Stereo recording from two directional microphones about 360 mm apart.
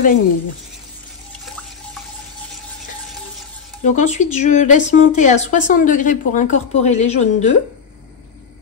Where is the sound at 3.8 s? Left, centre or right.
Centre.